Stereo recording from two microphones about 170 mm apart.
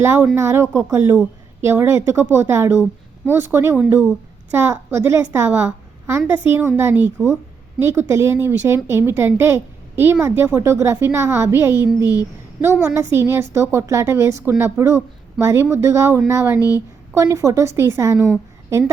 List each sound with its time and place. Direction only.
0.0 s a woman's voice: 15° right (ahead or behind)
16.6 s a woman's voice: 20° left (ahead or behind)
17.2 s a woman's voice: 20° right (ahead or behind)